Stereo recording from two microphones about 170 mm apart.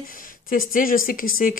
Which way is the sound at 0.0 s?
55° left (ahead or behind).